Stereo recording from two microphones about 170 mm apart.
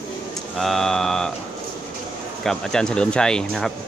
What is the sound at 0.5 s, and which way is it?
Speech, centre (ahead or behind).